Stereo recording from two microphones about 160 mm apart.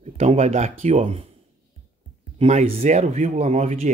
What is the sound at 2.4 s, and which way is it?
Speech, 40° right (ahead or behind).